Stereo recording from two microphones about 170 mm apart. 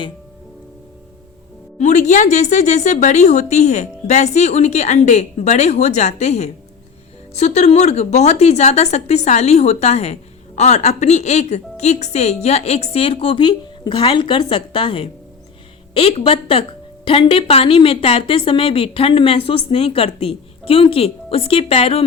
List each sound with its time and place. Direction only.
1.8 s a woman's voice: 45° left (ahead or behind)